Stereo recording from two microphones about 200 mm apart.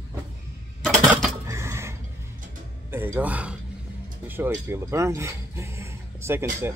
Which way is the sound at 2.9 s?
10° right (ahead or behind).